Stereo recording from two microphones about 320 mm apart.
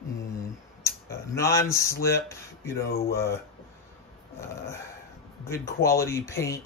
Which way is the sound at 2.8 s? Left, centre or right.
Left.